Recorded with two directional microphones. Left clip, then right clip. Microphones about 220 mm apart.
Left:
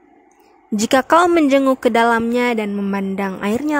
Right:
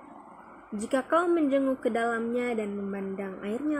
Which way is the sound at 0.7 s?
50° left (ahead or behind).